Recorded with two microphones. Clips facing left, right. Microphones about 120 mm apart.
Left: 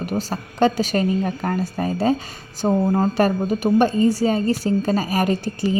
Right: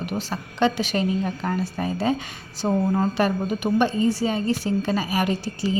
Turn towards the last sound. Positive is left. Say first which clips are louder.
# left 3 dB
turn(degrees=50)  # may be behind; listen again after turning